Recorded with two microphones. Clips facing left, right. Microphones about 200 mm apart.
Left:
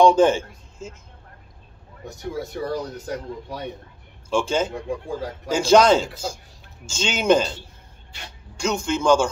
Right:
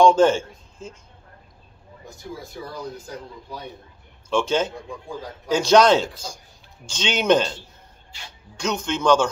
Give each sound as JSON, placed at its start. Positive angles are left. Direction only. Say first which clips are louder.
{"t": 0.0, "sound": "a man's voice", "louder": "even", "side_deg": 15}
{"t": 2.0, "sound": "a man's voice", "louder": "left 7 dB", "side_deg": 70}
{"t": 4.3, "sound": "speech", "louder": "even", "side_deg": 10}
{"t": 4.7, "sound": "a man's voice", "louder": "left 6 dB", "side_deg": 75}
{"t": 5.5, "sound": "speech", "louder": "even", "side_deg": 10}
{"t": 8.6, "sound": "speech", "louder": "left 1 dB", "side_deg": 10}